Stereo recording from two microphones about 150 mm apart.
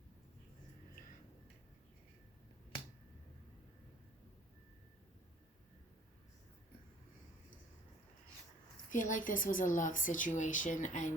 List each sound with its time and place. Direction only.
8.9 s speech: 60° left (ahead or behind)